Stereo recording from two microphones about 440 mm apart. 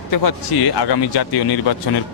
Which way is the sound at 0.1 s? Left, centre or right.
Left.